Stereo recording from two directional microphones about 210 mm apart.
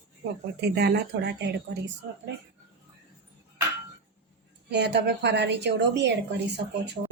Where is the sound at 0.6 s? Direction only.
50° right (ahead or behind).